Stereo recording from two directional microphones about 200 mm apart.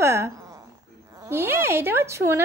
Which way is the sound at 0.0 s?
15° right (ahead or behind).